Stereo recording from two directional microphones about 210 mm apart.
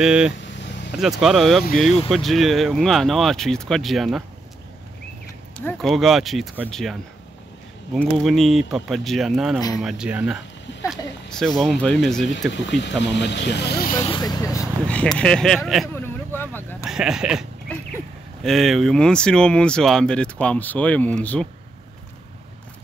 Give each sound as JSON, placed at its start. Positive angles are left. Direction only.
{"t": 0.0, "sound": "speech", "side_deg": -5}
{"t": 5.6, "sound": "speech", "side_deg": 5}
{"t": 10.7, "sound": "a sound", "side_deg": 55}
{"t": 11.2, "sound": "speech", "side_deg": 0}
{"t": 12.6, "sound": "speech", "side_deg": 55}
{"t": 14.0, "sound": "speech", "side_deg": 20}
{"t": 14.9, "sound": "speech", "side_deg": 5}
{"t": 16.8, "sound": "sheep", "side_deg": -5}
{"t": 18.4, "sound": "speech", "side_deg": 0}